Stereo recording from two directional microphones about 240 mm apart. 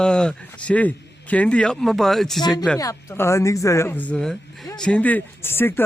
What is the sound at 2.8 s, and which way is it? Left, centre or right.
Speech, centre.